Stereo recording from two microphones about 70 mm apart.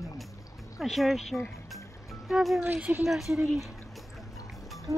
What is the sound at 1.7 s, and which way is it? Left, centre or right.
Music, centre.